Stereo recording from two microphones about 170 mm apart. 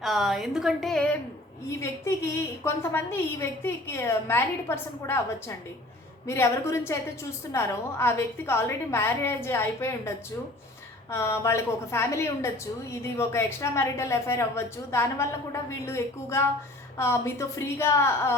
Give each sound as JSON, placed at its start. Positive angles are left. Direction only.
{"t": 0.0, "sound": "a woman's voice", "side_deg": 0}
{"t": 1.8, "sound": "a woman's voice", "side_deg": 15}
{"t": 11.1, "sound": "a woman's voice", "side_deg": 15}